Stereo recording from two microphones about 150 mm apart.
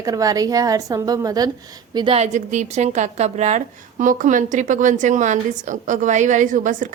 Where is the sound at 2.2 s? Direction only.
50° right (ahead or behind).